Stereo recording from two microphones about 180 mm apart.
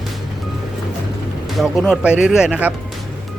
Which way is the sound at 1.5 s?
Centre (ahead or behind).